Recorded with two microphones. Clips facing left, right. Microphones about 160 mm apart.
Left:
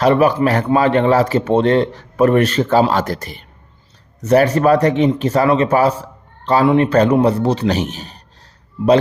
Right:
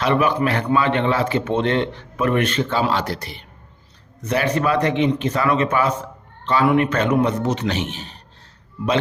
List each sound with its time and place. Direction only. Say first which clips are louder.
0.0 s a man's voice: left 6 dB; 40° left (ahead or behind)